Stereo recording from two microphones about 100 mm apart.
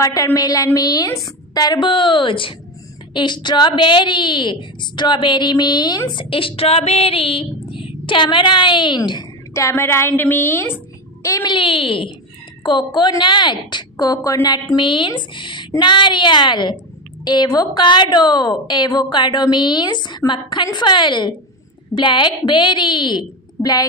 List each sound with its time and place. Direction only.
0.0 s a woman's voice: 35° left (ahead or behind)
1.9 s female singing: 55° left (ahead or behind)
3.1 s a woman's voice: 50° left (ahead or behind)
6.3 s female singing: 65° left (ahead or behind); by 9.2 s 50° left (ahead or behind)
9.5 s a woman's voice: 25° left (ahead or behind)
11.4 s female singing: 60° left (ahead or behind)
12.6 s a woman's voice: 50° left (ahead or behind)